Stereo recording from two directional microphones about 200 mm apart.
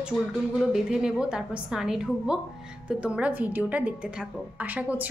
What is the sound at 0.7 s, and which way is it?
A woman's voice, 5° right (ahead or behind).